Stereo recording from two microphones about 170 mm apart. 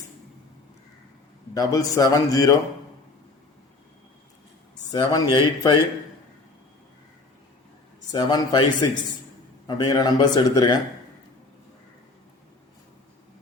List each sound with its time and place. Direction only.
1.5 s a man's voice: 20° left (ahead or behind)
4.9 s a man's voice: 25° left (ahead or behind)
8.1 s a man's voice: 25° left (ahead or behind)